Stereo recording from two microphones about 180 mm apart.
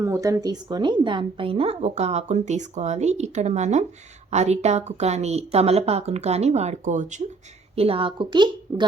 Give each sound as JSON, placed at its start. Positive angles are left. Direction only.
{"t": 0.0, "sound": "a woman's voice", "side_deg": -15}
{"t": 7.8, "sound": "a woman's voice", "side_deg": -30}